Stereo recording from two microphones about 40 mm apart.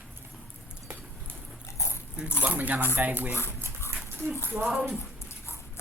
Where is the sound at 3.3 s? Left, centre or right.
Left.